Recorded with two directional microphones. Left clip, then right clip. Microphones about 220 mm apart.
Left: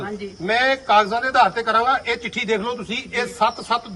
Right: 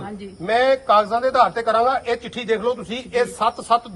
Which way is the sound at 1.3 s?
30° right (ahead or behind).